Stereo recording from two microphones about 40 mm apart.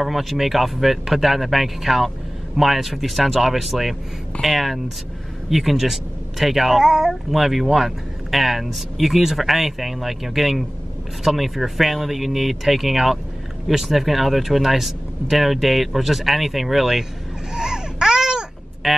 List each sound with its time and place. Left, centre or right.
0.0 s speech: centre
17.6 s baby cry: centre
18.8 s speech: centre